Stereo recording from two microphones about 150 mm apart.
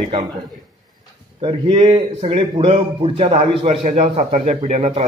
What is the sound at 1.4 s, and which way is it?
A man's voice, 35° right (ahead or behind).